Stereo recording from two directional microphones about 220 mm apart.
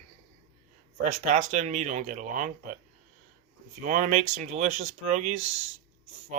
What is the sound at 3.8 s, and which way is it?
Speech, 35° right (ahead or behind).